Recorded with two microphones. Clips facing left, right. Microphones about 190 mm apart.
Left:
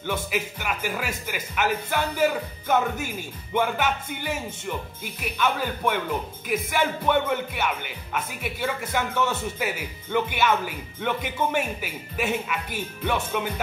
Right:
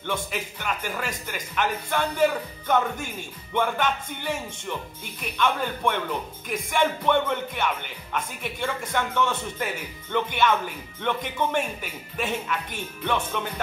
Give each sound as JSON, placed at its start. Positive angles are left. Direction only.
{"t": 0.0, "sound": "music", "side_deg": 10}